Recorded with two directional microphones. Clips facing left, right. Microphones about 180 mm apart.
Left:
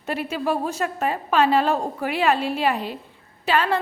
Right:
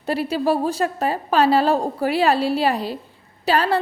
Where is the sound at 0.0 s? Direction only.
35° right (ahead or behind).